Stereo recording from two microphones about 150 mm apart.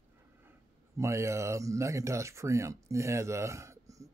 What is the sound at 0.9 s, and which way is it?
Speech, 20° right (ahead or behind).